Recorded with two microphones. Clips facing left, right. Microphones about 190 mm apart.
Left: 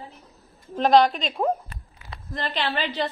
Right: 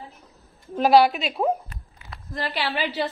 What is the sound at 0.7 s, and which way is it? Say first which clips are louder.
A woman's voice: right 1 dB; 5° right (ahead or behind).